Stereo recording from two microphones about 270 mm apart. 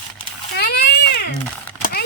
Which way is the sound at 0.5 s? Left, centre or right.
Left.